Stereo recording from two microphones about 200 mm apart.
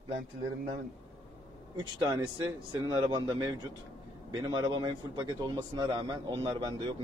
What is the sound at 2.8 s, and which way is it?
A man's voice, 20° right (ahead or behind).